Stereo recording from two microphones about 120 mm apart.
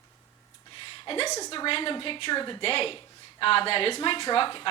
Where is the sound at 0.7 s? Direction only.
45° left (ahead or behind).